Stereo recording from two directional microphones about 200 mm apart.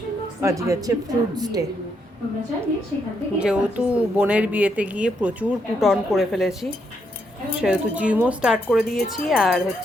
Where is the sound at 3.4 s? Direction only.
5° right (ahead or behind).